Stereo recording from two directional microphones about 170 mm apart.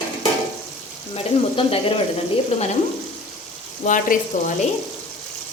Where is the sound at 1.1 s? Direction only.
35° left (ahead or behind).